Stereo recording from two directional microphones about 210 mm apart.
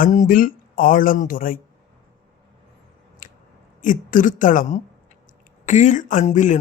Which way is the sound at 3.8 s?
40° left (ahead or behind).